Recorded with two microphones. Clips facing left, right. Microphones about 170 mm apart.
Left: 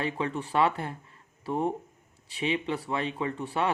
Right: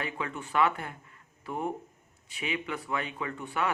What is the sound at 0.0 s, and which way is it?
Speech, 30° left (ahead or behind).